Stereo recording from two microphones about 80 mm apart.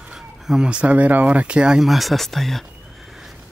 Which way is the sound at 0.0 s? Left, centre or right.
Centre.